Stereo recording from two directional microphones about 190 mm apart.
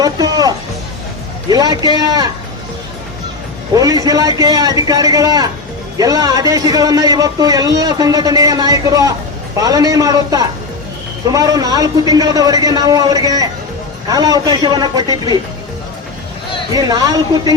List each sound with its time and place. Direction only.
0.0 s a man's voice: 20° right (ahead or behind)
3.7 s a man's voice: 20° right (ahead or behind)
16.7 s a man's voice: 20° right (ahead or behind)